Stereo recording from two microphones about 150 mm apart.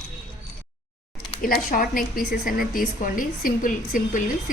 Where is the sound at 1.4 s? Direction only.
75° left (ahead or behind).